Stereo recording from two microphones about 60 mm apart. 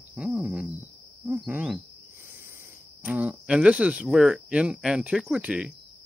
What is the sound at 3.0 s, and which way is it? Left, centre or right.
Speech, right.